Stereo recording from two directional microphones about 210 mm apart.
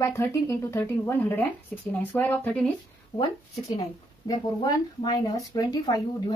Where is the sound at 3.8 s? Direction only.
20° left (ahead or behind).